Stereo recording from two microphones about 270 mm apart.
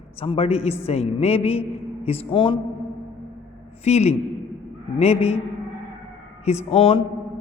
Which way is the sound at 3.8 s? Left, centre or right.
Left.